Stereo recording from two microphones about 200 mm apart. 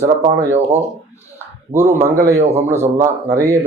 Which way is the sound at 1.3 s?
10° right (ahead or behind).